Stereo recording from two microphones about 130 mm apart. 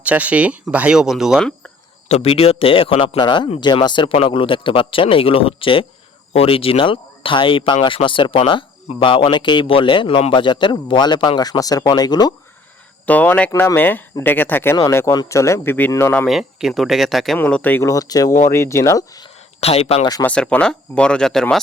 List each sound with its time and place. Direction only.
0.0 s speech: 10° right (ahead or behind)
2.0 s speech: 50° left (ahead or behind); by 12.3 s 30° left (ahead or behind)
13.1 s a man's voice: 10° left (ahead or behind)
16.2 s speech: 5° right (ahead or behind)
17.3 s speech: 15° left (ahead or behind)
17.8 s a man's voice: 25° left (ahead or behind)
19.5 s speech: 50° left (ahead or behind)
20.2 s speech: 10° left (ahead or behind)